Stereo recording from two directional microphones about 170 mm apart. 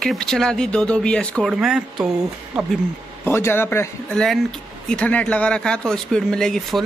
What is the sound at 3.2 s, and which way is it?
Speech, 15° left (ahead or behind).